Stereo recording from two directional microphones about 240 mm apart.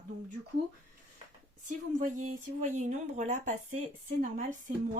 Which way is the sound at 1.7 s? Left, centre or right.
Right.